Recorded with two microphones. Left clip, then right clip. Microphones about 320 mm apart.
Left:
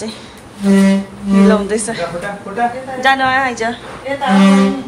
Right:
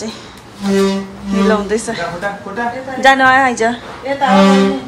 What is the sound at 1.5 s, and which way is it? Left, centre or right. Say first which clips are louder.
A woman's voice: right 2 dB; centre.